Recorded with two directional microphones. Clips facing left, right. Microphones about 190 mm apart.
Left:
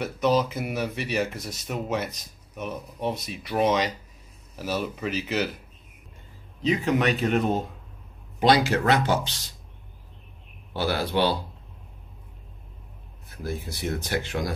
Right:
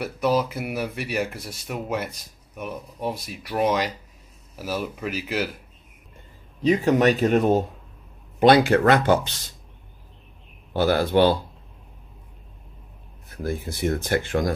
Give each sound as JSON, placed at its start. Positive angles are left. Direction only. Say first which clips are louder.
{"t": 0.0, "sound": "speech", "louder": "even", "side_deg": -10}
{"t": 6.6, "sound": "speech", "louder": "right 5 dB", "side_deg": -40}
{"t": 8.4, "sound": "speech", "louder": "right 5 dB", "side_deg": -55}
{"t": 10.7, "sound": "speech", "louder": "right 6 dB", "side_deg": -50}
{"t": 13.4, "sound": "speech", "louder": "right 5 dB", "side_deg": -55}